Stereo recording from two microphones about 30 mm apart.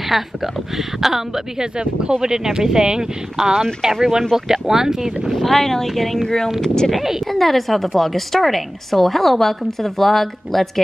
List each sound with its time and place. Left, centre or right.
0.1 s speech: centre
1.6 s speech: right
5.3 s a woman's voice: centre
5.6 s speech: centre
6.2 s speech: centre
7.0 s speech: centre
7.2 s a woman's voice: centre